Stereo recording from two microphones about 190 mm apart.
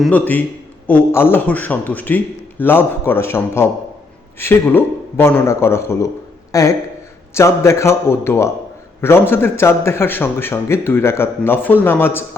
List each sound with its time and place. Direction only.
0.0 s a man's voice: 10° left (ahead or behind)